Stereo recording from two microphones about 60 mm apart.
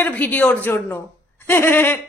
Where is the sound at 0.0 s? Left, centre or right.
Left.